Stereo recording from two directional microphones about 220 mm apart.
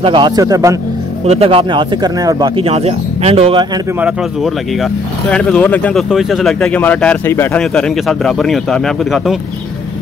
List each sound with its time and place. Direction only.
0.0 s speech: 20° right (ahead or behind)
1.2 s speech: 25° right (ahead or behind)
4.0 s speech: centre (ahead or behind)